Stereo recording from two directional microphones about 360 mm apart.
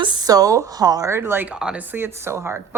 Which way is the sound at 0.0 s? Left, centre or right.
Centre.